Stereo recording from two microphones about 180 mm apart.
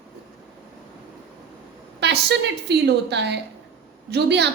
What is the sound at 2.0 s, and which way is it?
A woman's voice, 70° right (ahead or behind).